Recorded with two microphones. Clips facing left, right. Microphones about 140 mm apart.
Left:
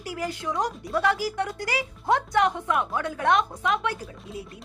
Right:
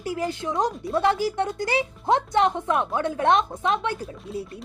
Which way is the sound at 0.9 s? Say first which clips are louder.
Right 2 dB; 25° right (ahead or behind).